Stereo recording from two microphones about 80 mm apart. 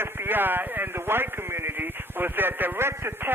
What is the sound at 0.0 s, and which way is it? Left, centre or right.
Speech, right.